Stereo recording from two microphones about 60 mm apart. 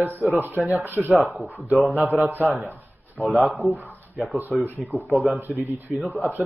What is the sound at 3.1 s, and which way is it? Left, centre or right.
Speech, centre.